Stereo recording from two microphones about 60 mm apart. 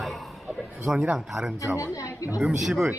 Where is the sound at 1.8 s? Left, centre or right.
Left.